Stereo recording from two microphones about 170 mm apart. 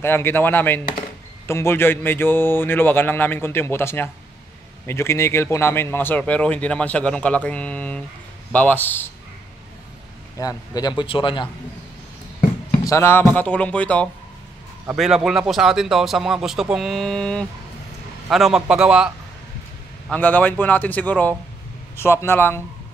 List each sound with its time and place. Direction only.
0.0 s speech: 15° left (ahead or behind)
10.4 s a man's voice: 20° left (ahead or behind)
12.8 s speech: 15° left (ahead or behind)
15.0 s a man's voice: 5° right (ahead or behind)
20.1 s speech: 10° left (ahead or behind)